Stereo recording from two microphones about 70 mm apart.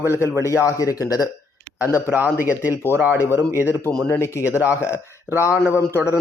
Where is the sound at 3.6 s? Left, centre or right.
Left.